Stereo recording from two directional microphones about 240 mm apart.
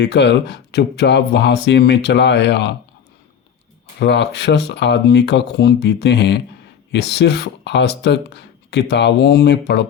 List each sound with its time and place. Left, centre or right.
0.0 s speech: left
4.0 s speech: left